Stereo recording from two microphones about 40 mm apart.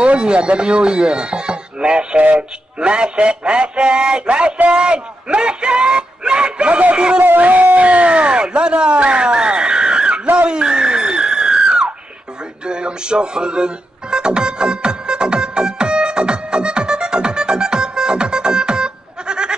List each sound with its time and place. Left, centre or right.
0.0 s speech: right
2.3 s music: right
4.7 s speech: right
7.2 s a sound: right
12.6 s music: right